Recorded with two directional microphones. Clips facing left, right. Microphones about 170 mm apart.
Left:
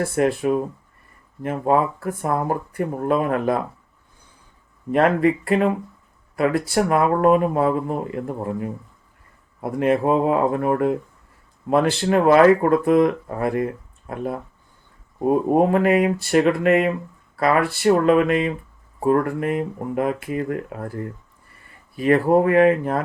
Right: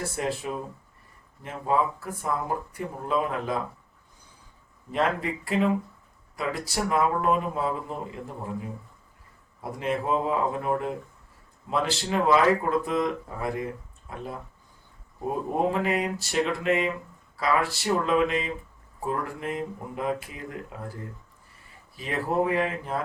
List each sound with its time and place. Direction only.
0.0 s speech: 60° left (ahead or behind)
4.9 s speech: 60° left (ahead or behind)
15.5 s speech: 60° left (ahead or behind)